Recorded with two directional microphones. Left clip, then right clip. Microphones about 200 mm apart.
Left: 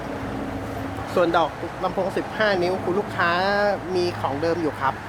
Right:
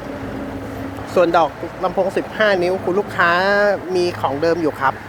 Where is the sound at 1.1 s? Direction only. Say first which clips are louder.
Right 6 dB; 20° right (ahead or behind).